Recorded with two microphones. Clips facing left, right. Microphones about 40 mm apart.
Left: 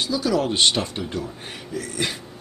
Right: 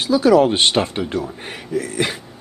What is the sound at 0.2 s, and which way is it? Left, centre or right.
A woman's voice, right.